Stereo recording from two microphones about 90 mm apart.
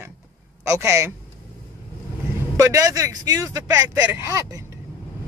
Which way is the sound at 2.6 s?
40° right (ahead or behind).